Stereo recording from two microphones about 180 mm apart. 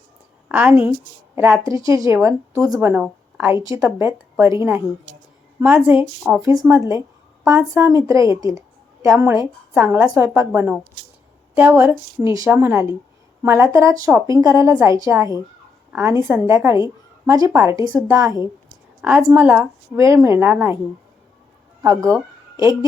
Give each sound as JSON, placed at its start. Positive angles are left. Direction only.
{"t": 0.4, "sound": "a woman's voice", "side_deg": -10}
{"t": 2.9, "sound": "a woman's voice", "side_deg": -10}
{"t": 6.4, "sound": "a woman's voice", "side_deg": -20}
{"t": 21.8, "sound": "speech", "side_deg": -15}